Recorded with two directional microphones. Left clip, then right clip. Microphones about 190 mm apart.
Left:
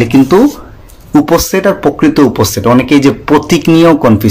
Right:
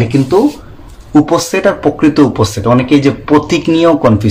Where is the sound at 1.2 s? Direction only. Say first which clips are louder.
Left 3 dB; 40° left (ahead or behind).